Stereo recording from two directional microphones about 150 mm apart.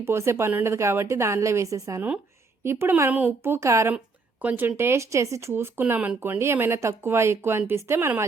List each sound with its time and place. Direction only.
0.0 s a woman's voice: 15° right (ahead or behind)